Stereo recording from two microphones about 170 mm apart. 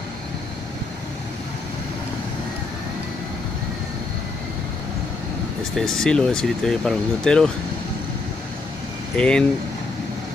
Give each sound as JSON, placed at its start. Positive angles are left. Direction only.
{"t": 5.8, "sound": "speech", "side_deg": 5}
{"t": 9.1, "sound": "speech", "side_deg": 5}